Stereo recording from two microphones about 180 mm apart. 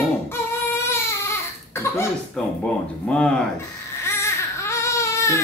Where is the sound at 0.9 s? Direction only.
15° left (ahead or behind).